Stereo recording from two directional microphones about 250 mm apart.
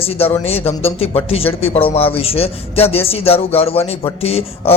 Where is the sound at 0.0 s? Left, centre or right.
Left.